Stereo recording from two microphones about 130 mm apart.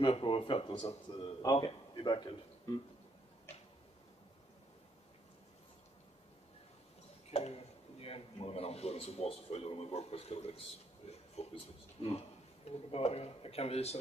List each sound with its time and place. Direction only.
0.0 s speech: 45° left (ahead or behind)
1.2 s a man's voice: 35° left (ahead or behind)
7.2 s a man's voice: 55° left (ahead or behind)
11.1 s a sound: 50° left (ahead or behind)
12.9 s speech: 50° left (ahead or behind)